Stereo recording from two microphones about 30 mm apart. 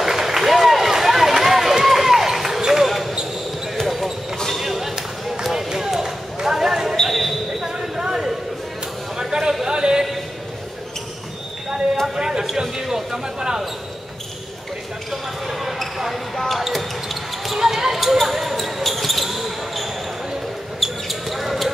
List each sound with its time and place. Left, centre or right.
0.0 s run: centre
2.6 s basketball bounce: centre
2.9 s basketball bounce: centre
5.8 s a sound: centre
7.1 s basketball bounce: centre
7.6 s a sound: centre
12.2 s a sound: centre
15.0 s basketball bounce: centre
15.8 s basketball bounce: centre
17.6 s basketball bounce: centre
20.8 s basketball bounce: centre